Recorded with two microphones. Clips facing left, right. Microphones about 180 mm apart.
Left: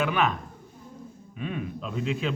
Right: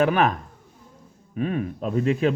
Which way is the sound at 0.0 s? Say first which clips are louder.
Right 5 dB; 45° right (ahead or behind).